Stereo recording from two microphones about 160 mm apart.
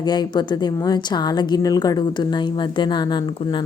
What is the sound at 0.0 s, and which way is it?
A woman's voice, 25° left (ahead or behind).